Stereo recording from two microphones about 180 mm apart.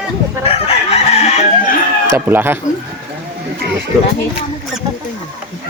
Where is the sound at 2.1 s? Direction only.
10° right (ahead or behind).